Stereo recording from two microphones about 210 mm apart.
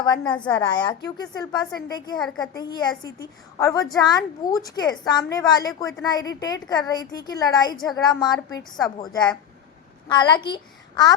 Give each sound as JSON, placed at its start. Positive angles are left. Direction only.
{"t": 0.0, "sound": "a woman's voice", "side_deg": 20}
{"t": 0.3, "sound": "a woman's voice", "side_deg": 5}
{"t": 0.6, "sound": "a woman's voice", "side_deg": 20}
{"t": 2.1, "sound": "a woman's voice", "side_deg": 5}
{"t": 2.6, "sound": "a woman's voice", "side_deg": 20}